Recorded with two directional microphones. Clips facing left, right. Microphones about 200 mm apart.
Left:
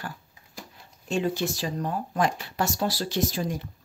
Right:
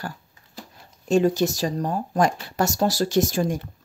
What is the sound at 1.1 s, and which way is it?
Speech, 40° right (ahead or behind).